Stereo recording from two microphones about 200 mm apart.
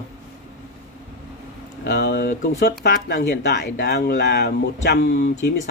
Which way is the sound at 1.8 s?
60° left (ahead or behind).